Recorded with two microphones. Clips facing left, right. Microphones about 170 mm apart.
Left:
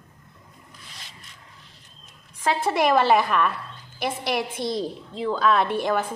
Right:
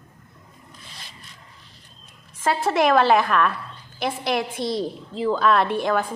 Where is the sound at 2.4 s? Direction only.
Centre (ahead or behind).